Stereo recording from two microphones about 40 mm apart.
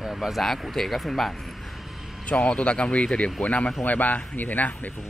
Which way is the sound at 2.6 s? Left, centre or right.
Left.